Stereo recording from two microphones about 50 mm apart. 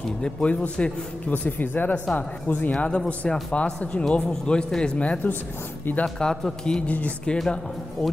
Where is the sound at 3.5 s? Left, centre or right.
Left.